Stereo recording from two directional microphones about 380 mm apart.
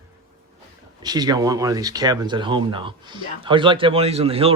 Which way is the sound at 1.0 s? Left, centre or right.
Centre.